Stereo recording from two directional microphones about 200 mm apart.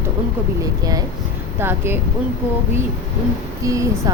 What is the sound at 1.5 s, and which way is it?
Speech, 10° right (ahead or behind).